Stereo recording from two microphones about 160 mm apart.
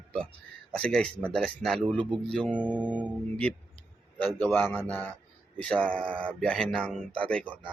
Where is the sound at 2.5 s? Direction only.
10° right (ahead or behind).